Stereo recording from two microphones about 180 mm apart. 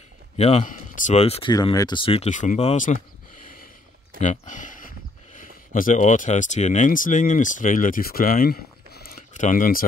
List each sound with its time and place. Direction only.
0.4 s speech: 35° left (ahead or behind)
1.5 s speech: 20° left (ahead or behind); by 9.8 s 50° left (ahead or behind)